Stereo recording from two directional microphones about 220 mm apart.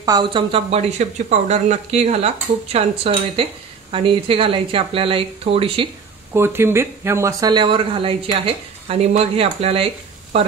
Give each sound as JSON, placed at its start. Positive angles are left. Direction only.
{"t": 0.0, "sound": "speech", "side_deg": -20}
{"t": 6.3, "sound": "speech", "side_deg": -10}